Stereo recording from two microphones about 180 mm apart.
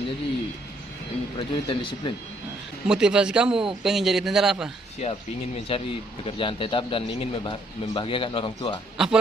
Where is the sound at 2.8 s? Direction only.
5° right (ahead or behind).